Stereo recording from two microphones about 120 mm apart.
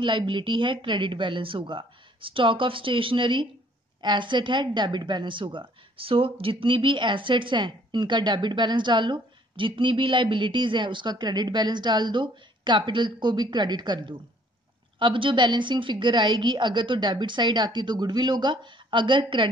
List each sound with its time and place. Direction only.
0.0 s a woman's voice: 40° right (ahead or behind)